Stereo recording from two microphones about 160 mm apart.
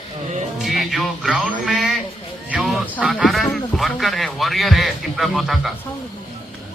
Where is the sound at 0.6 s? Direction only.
Centre (ahead or behind).